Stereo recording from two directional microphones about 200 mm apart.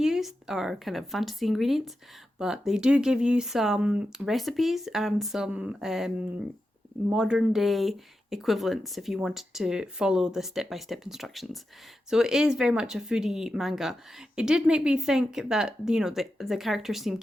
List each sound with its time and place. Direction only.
0.0 s speech: centre (ahead or behind)
7.1 s speech: 5° right (ahead or behind)